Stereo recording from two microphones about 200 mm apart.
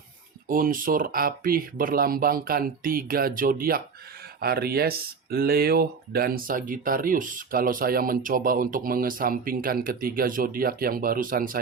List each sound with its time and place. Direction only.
0.4 s speech: 45° right (ahead or behind)